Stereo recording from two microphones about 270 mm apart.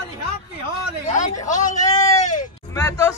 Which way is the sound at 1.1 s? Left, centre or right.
Left.